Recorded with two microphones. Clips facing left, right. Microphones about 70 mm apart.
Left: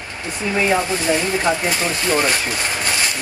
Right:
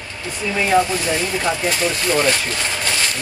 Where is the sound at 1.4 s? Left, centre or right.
Left.